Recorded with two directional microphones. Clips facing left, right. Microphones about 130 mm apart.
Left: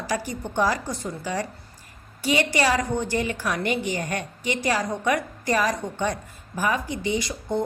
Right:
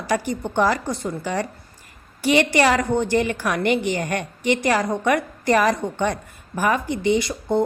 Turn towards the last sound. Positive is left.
turn(degrees=-60)  # may be behind; listen again after turning